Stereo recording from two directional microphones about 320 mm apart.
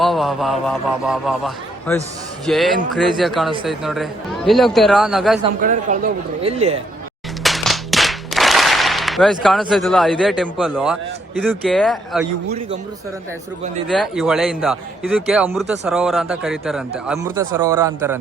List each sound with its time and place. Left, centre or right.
0.0 s a man's voice: centre
5.5 s speech: right
7.4 s music: centre
11.3 s a man's voice: centre
13.9 s a man's voice: centre